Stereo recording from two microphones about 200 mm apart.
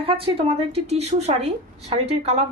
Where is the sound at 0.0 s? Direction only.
30° right (ahead or behind).